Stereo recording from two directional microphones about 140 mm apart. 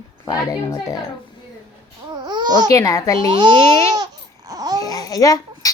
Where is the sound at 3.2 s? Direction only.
35° right (ahead or behind).